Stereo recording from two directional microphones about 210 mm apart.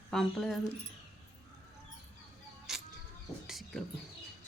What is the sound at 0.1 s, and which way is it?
Speech, centre (ahead or behind).